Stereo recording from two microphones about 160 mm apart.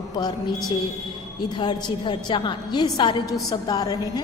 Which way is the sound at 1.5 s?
25° left (ahead or behind).